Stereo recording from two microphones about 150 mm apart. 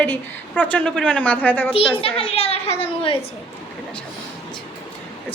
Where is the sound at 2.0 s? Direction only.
40° left (ahead or behind).